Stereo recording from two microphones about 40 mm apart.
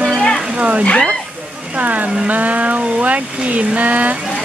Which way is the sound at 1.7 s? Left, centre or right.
Right.